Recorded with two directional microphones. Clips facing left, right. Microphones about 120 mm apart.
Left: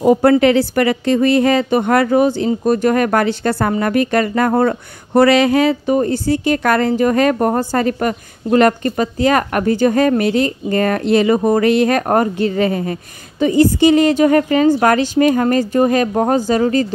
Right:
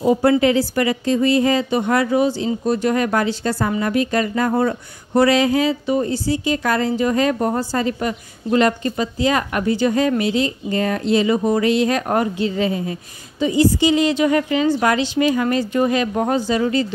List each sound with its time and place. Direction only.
0.0 s a woman's voice: 55° left (ahead or behind)